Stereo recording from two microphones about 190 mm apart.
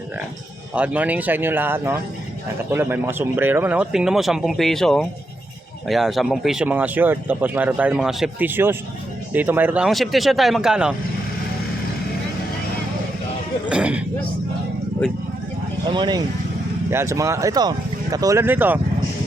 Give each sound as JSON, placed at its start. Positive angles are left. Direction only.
{"t": 0.7, "sound": "speech", "side_deg": -5}
{"t": 13.7, "sound": "speech", "side_deg": -5}
{"t": 15.9, "sound": "speech", "side_deg": -25}